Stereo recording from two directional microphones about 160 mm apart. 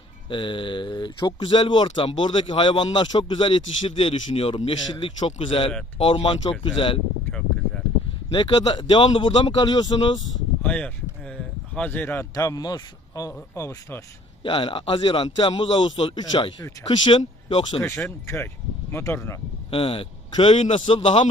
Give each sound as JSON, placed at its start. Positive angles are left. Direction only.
{"t": 0.3, "sound": "a man's voice", "side_deg": 30}
{"t": 7.3, "sound": "a sound", "side_deg": 5}
{"t": 8.3, "sound": "speech", "side_deg": 25}
{"t": 10.6, "sound": "speech", "side_deg": 10}
{"t": 14.4, "sound": "a man's voice", "side_deg": 30}
{"t": 18.9, "sound": "speech", "side_deg": 15}
{"t": 19.7, "sound": "speech", "side_deg": 35}
{"t": 20.5, "sound": "a man's voice", "side_deg": 45}
{"t": 20.7, "sound": "a man's voice", "side_deg": 35}